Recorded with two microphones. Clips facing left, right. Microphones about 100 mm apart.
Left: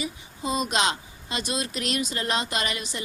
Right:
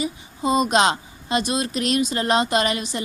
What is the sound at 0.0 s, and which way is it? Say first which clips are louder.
A woman's voice: right 7 dB; 30° right (ahead or behind).